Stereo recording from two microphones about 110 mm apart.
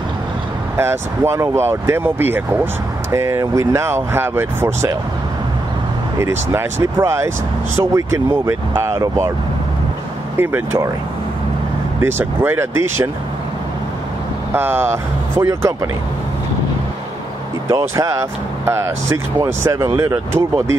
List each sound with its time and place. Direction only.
0.7 s speech: 25° right (ahead or behind)
6.1 s speech: 25° right (ahead or behind)
10.3 s speech: 20° right (ahead or behind)
12.0 s speech: 20° right (ahead or behind)
14.5 s speech: 20° right (ahead or behind)
17.6 s speech: 30° right (ahead or behind)